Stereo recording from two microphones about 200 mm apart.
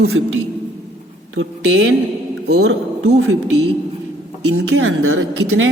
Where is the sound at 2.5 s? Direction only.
55° right (ahead or behind).